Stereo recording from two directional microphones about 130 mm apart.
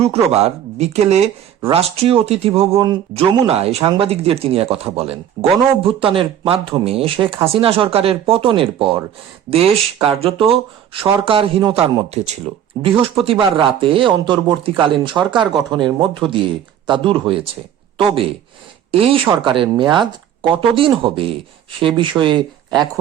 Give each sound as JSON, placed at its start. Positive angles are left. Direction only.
{"t": 0.0, "sound": "speech", "side_deg": -55}
{"t": 12.1, "sound": "speech", "side_deg": -60}
{"t": 12.8, "sound": "speech", "side_deg": -40}